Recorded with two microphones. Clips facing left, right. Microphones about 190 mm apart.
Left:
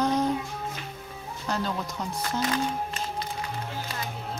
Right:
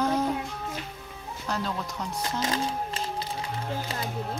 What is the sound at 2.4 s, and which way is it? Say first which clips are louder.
Speech: left 2 dB; 25° right (ahead or behind).